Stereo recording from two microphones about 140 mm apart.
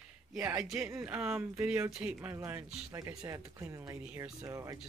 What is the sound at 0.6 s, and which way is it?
Speech, 5° right (ahead or behind).